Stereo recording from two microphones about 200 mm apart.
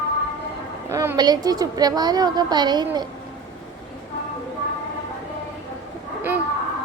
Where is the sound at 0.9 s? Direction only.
15° right (ahead or behind).